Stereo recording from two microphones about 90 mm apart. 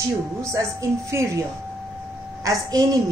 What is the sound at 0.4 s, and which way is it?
A woman's voice, 35° right (ahead or behind).